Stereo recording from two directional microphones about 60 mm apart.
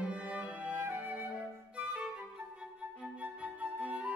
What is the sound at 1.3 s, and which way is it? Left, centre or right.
Flute, right.